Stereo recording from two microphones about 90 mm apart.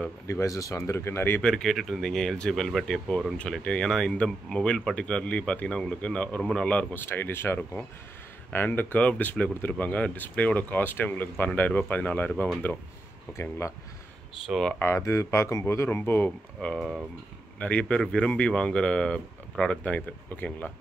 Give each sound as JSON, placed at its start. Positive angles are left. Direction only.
{"t": 0.3, "sound": "speech", "side_deg": 40}
{"t": 1.4, "sound": "speech", "side_deg": 5}
{"t": 13.4, "sound": "speech", "side_deg": 30}
{"t": 14.4, "sound": "speech", "side_deg": 0}
{"t": 14.8, "sound": "speech", "side_deg": 30}
{"t": 16.7, "sound": "speech", "side_deg": -5}
{"t": 17.6, "sound": "speech", "side_deg": 15}